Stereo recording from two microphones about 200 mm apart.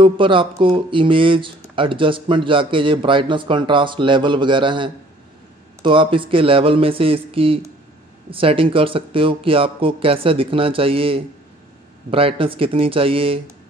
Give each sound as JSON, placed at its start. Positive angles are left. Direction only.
{"t": 0.0, "sound": "speech", "side_deg": -25}